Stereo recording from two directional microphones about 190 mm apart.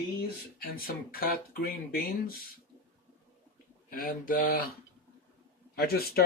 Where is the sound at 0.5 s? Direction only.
50° left (ahead or behind).